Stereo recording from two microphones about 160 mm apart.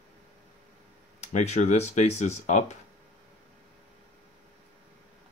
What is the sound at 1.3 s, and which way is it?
Speech, 45° left (ahead or behind).